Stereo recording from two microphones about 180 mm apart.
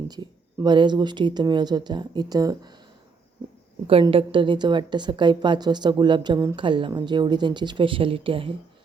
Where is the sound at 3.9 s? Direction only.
30° right (ahead or behind).